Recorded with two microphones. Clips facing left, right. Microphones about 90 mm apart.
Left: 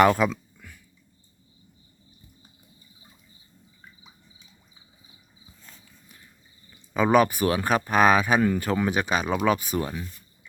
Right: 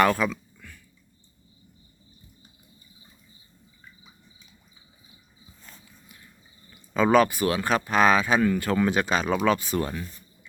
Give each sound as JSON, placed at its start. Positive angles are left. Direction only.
{"t": 0.0, "sound": "speech", "side_deg": 20}
{"t": 0.5, "sound": "a sound", "side_deg": 15}
{"t": 6.9, "sound": "speech", "side_deg": 15}